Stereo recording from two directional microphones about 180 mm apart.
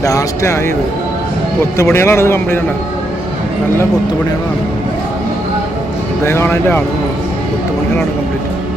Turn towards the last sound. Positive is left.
turn(degrees=10)  # may be behind; listen again after turning